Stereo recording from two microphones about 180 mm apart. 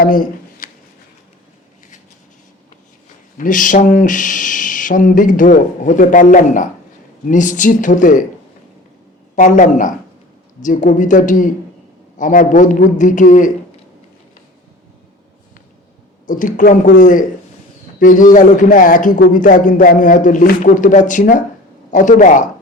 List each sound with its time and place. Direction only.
0.0 s a sound: 50° left (ahead or behind)
3.3 s speech: 45° left (ahead or behind)
9.3 s speech: 45° left (ahead or behind)
16.2 s speech: 45° left (ahead or behind)